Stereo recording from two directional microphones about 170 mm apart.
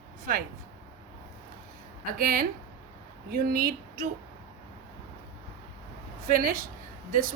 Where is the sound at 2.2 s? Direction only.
60° right (ahead or behind).